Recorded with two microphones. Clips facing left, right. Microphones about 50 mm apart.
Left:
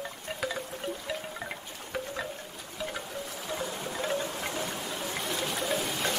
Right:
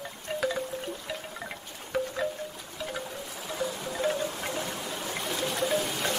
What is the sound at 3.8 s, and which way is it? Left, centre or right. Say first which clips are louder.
Wind chime: right 2 dB; centre.